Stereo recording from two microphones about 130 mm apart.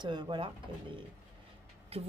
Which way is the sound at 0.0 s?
35° right (ahead or behind).